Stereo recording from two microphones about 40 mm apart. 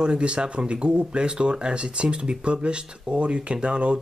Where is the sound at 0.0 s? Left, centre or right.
Right.